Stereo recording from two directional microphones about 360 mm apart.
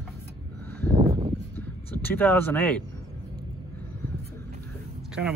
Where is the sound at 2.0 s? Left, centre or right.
Centre.